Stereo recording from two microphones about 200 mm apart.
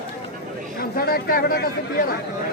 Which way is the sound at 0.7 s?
50° left (ahead or behind).